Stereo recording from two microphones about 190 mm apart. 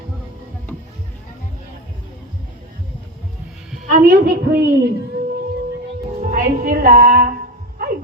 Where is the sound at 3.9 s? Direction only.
50° right (ahead or behind).